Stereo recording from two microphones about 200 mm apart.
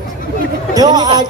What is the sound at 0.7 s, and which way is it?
Speech, 20° right (ahead or behind).